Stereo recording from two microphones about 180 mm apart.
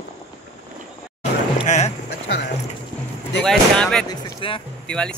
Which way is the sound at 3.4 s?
5° left (ahead or behind).